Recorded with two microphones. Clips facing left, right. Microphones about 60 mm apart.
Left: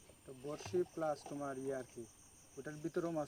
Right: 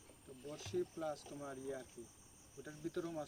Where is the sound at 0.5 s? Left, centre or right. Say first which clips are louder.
Left 3 dB; left.